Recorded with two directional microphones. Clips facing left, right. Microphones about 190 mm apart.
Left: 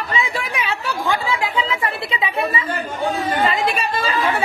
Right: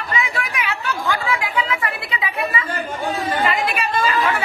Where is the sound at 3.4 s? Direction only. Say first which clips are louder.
Left 1 dB; 30° left (ahead or behind).